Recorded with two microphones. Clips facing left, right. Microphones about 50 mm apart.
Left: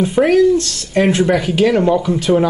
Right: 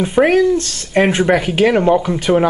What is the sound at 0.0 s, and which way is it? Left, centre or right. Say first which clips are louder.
Speech: left 1 dB; centre.